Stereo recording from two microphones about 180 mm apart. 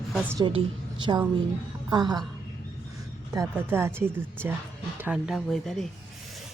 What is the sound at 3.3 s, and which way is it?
A woman's voice, 15° right (ahead or behind).